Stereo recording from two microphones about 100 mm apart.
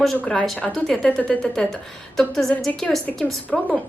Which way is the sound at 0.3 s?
10° left (ahead or behind).